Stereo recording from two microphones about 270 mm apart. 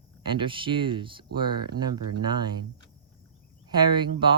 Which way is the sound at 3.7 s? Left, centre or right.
Centre.